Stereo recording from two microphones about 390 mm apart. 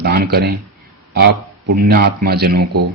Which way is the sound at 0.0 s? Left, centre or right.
Right.